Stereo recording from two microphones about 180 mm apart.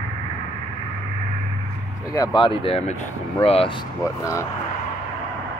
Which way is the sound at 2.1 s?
20° left (ahead or behind).